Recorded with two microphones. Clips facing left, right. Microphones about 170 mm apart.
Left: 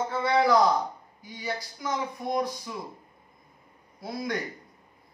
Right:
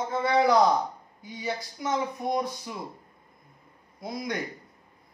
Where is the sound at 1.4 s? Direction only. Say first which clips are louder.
Right 2 dB; 25° right (ahead or behind).